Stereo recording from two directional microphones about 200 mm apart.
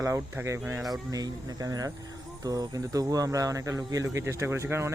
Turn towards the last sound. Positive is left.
turn(degrees=-15)  # may be behind; listen again after turning